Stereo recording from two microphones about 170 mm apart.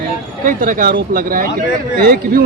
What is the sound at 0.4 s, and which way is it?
Speech, 55° right (ahead or behind).